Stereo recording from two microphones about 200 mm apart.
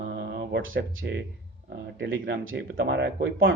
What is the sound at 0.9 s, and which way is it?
Speech, 70° right (ahead or behind).